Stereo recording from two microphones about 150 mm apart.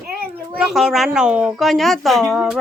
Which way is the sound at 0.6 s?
Centre (ahead or behind).